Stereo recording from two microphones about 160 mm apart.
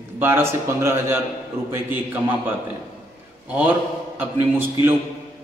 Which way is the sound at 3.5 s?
10° right (ahead or behind).